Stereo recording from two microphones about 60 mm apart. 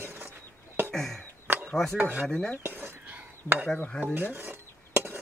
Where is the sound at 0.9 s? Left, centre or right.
Centre.